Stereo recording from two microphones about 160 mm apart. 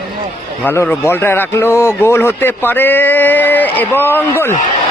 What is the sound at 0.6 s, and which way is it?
A man's voice, 10° left (ahead or behind).